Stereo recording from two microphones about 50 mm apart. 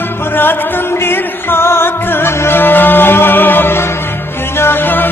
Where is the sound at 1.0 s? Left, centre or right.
Left.